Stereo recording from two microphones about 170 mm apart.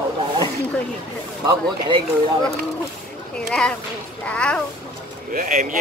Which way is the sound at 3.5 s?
5° left (ahead or behind).